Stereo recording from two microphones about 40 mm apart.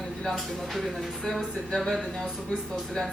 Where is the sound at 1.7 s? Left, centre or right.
Centre.